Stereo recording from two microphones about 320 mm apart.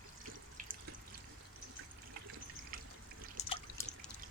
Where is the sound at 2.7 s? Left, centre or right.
Right.